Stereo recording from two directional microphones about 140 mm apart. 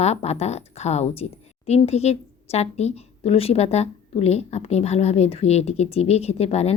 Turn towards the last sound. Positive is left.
turn(degrees=50)  # may be behind; listen again after turning